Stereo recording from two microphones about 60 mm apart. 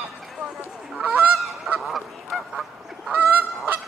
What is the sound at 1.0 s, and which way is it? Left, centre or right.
Goose, right.